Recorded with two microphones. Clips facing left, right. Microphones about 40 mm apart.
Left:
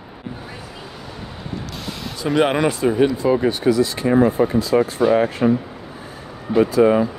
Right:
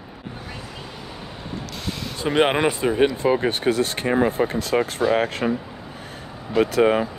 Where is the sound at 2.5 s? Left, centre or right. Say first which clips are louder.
Left 2 dB; right.